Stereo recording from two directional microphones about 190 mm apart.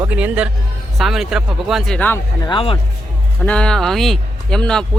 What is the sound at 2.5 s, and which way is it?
Speech, 30° left (ahead or behind).